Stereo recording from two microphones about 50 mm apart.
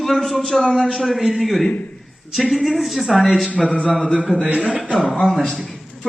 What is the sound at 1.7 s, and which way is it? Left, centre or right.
Speech, left.